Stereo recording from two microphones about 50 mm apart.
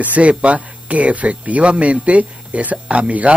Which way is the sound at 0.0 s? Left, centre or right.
Right.